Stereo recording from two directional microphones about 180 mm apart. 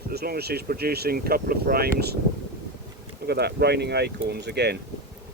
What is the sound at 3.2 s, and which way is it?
Speech, 65° right (ahead or behind).